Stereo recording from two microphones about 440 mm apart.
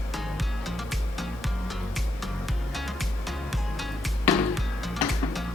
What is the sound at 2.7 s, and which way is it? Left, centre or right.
Music, centre.